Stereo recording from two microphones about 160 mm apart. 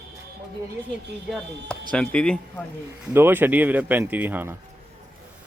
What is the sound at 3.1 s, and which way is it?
Speech, 15° right (ahead or behind).